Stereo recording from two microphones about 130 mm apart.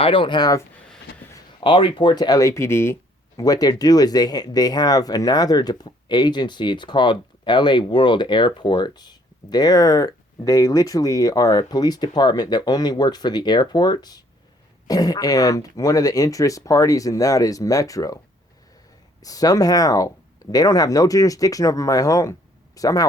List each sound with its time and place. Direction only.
0.0 s speech: 40° left (ahead or behind)
1.6 s speech: 40° left (ahead or behind); by 18.2 s 25° left (ahead or behind)
19.2 s speech: 30° left (ahead or behind)